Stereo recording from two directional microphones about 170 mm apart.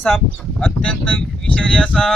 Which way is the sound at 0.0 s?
5° left (ahead or behind).